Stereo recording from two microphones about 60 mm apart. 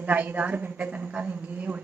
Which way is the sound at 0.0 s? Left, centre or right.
Right.